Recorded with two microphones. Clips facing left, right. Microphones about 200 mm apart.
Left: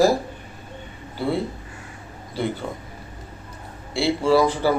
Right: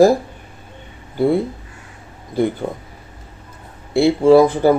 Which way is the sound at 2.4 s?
50° right (ahead or behind).